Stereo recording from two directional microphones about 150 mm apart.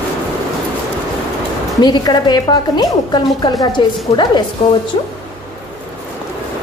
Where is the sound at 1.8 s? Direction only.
30° left (ahead or behind).